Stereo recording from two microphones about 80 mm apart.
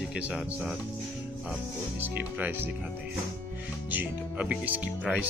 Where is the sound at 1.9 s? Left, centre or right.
Right.